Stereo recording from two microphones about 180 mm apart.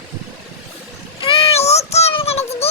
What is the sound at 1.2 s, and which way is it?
Child singing, 30° left (ahead or behind).